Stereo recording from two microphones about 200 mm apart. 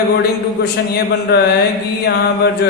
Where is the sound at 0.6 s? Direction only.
55° left (ahead or behind).